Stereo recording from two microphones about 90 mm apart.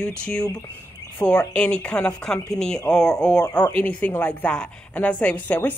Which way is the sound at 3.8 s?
20° left (ahead or behind).